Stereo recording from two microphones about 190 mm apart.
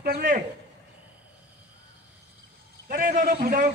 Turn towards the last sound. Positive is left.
turn(degrees=-50)  # may be behind; listen again after turning